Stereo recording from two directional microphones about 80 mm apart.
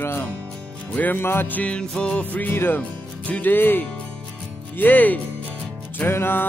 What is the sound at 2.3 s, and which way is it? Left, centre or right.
Music, left.